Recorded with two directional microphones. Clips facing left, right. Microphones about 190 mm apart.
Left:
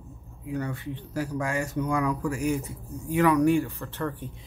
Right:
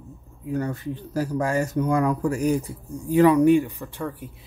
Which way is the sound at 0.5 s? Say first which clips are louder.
Right 4 dB; 40° right (ahead or behind).